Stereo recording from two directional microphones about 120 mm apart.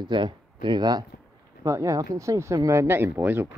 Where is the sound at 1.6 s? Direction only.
25° right (ahead or behind).